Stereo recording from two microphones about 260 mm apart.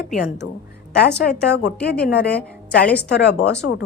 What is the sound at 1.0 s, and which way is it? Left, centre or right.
A woman's voice, left.